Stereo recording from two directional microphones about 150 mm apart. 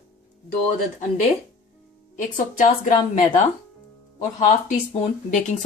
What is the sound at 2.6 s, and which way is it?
Speech, 55° left (ahead or behind).